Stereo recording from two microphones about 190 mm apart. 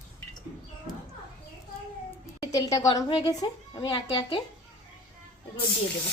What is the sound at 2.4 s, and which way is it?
A woman's voice, 20° left (ahead or behind).